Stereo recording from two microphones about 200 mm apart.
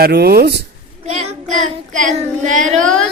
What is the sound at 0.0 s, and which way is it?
Speech, 50° right (ahead or behind).